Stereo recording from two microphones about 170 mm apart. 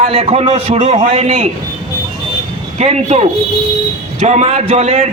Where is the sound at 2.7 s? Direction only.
40° right (ahead or behind).